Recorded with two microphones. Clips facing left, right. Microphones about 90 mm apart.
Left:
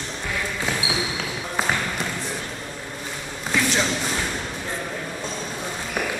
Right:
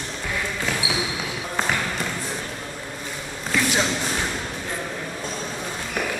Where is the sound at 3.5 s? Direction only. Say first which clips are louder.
Even; centre (ahead or behind).